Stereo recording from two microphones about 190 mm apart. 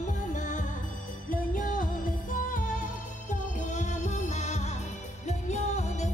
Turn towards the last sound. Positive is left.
turn(degrees=35)  # may be behind; listen again after turning